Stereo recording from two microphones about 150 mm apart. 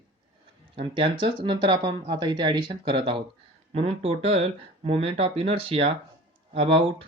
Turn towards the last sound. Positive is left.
turn(degrees=-40)  # may be behind; listen again after turning